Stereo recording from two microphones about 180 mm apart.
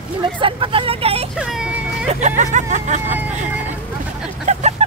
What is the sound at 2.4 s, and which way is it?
Speech, 40° right (ahead or behind).